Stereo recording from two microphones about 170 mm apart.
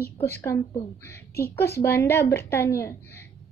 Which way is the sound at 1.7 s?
15° left (ahead or behind).